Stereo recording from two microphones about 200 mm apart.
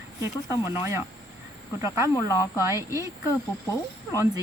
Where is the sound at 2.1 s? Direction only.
15° left (ahead or behind).